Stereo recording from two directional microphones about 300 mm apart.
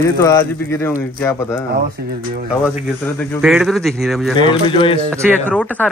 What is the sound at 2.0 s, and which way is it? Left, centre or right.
Speech, right.